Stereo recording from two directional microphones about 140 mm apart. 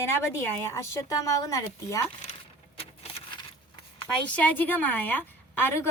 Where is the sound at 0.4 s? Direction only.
20° left (ahead or behind).